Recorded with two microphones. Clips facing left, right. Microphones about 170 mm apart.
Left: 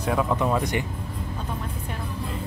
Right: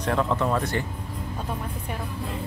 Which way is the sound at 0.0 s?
10° left (ahead or behind).